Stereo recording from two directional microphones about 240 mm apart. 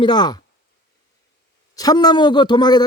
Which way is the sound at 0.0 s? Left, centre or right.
Centre.